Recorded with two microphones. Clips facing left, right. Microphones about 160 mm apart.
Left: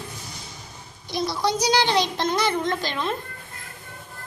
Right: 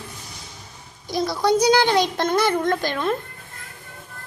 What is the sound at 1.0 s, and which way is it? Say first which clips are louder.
A child's voice: right 4 dB; 50° right (ahead or behind).